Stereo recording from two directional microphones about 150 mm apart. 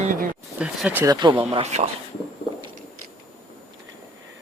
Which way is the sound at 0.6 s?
5° right (ahead or behind).